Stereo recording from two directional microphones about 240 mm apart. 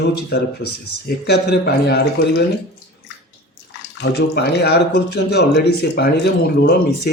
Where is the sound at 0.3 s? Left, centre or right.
Left.